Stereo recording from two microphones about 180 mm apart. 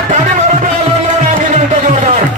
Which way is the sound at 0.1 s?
45° right (ahead or behind).